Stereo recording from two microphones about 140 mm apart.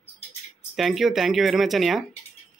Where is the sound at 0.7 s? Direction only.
Centre (ahead or behind).